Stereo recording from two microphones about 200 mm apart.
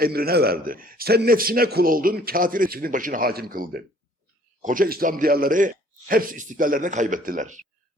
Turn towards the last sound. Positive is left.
turn(degrees=-40)  # may be behind; listen again after turning